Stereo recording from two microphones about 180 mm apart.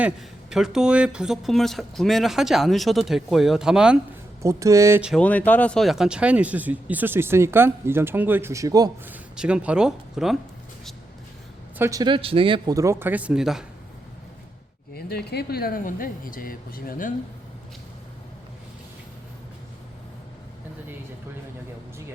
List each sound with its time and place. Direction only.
0.0 s speech: centre (ahead or behind)
4.4 s speech: 15° right (ahead or behind)
5.0 s speech: 5° left (ahead or behind); by 8.9 s 20° right (ahead or behind)
9.0 s speech: 5° right (ahead or behind)
11.8 s speech: 20° right (ahead or behind)
12.7 s speech: 15° right (ahead or behind)
14.9 s speech: 65° left (ahead or behind)